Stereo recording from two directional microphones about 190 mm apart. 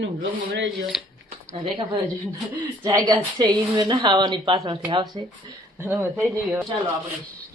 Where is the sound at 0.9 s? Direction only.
Centre (ahead or behind).